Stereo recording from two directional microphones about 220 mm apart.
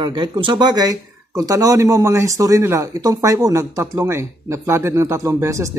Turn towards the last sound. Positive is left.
turn(degrees=-15)  # may be behind; listen again after turning